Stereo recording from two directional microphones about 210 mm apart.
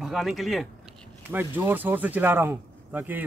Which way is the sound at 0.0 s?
Centre (ahead or behind).